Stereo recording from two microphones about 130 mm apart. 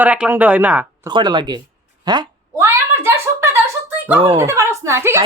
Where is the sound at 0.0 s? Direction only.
10° right (ahead or behind).